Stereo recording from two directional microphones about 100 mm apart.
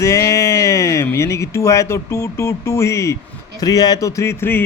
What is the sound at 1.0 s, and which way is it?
Speech, 30° left (ahead or behind).